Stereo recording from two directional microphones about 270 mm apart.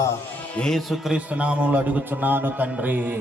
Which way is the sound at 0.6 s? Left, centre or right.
Centre.